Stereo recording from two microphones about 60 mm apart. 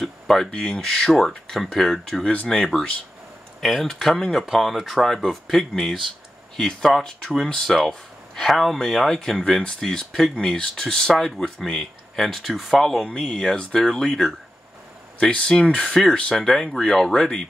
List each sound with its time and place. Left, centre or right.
0.0 s speech: centre